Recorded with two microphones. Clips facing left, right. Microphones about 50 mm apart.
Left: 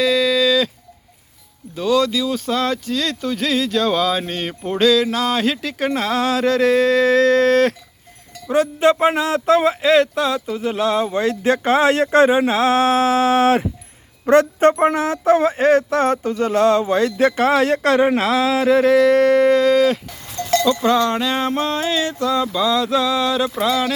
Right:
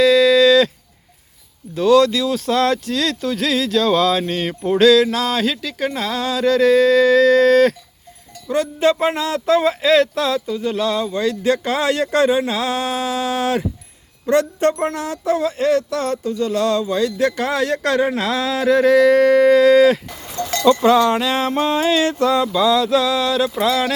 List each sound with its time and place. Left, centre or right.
0.0 s a sound: centre
1.7 s speech: centre
5.0 s speech: centre
11.0 s speech: left
18.3 s a sound: centre
20.7 s cowbell: centre
21.2 s a sound: centre
21.7 s cowbell: centre
22.0 s speech: right
22.5 s speech: centre